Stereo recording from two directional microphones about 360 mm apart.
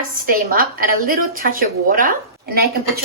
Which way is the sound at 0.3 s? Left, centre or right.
Right.